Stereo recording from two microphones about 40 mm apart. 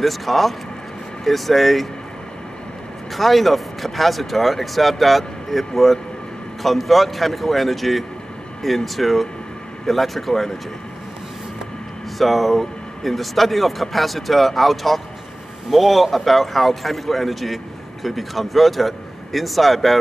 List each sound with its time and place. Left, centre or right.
0.0 s speech: centre
3.2 s speech: centre
12.2 s speech: centre